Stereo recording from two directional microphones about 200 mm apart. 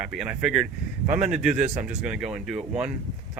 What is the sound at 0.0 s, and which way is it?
Speech, 5° right (ahead or behind).